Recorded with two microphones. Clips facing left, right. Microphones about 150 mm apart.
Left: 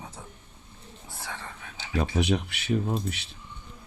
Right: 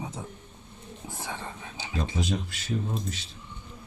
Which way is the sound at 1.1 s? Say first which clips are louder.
Right 2 dB; 15° right (ahead or behind).